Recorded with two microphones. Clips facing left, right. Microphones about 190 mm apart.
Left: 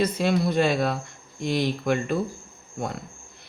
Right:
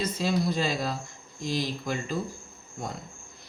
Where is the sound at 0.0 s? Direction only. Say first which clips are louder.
Left 5 dB; 60° left (ahead or behind).